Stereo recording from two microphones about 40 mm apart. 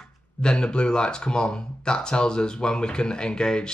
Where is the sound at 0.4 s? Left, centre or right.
Left.